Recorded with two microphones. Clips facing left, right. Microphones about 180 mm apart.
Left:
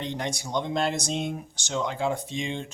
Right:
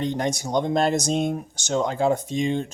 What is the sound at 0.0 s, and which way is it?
Speech, 45° right (ahead or behind).